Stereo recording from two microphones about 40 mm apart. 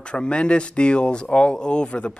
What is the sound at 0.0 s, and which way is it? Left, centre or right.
Speech, left.